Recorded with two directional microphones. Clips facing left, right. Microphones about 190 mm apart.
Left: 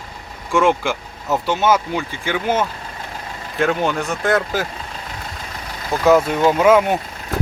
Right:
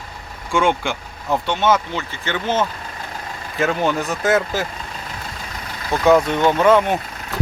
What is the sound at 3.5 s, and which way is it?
Speech, centre (ahead or behind).